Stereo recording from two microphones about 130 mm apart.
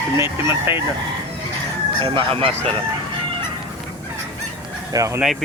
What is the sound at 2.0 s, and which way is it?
Speech, 40° right (ahead or behind).